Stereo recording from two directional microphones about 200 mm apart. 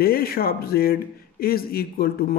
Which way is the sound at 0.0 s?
50° left (ahead or behind).